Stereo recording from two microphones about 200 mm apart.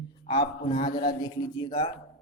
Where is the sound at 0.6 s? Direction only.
35° left (ahead or behind).